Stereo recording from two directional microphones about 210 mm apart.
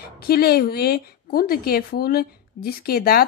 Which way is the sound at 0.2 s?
45° left (ahead or behind).